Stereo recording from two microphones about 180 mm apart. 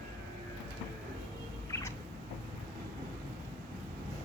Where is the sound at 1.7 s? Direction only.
15° left (ahead or behind).